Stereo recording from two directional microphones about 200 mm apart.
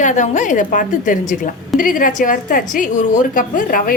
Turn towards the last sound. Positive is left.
turn(degrees=45)  # may be behind; listen again after turning